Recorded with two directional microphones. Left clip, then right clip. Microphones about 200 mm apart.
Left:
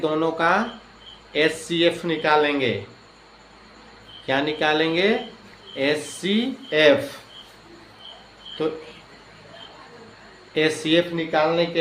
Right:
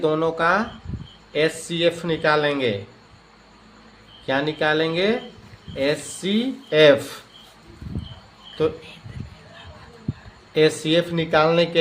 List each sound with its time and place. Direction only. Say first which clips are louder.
0.0 s a man's voice: right 1 dB; 30° right (ahead or behind)
4.3 s speech: even; 30° right (ahead or behind)
10.5 s a man's voice: right 2 dB; 30° right (ahead or behind)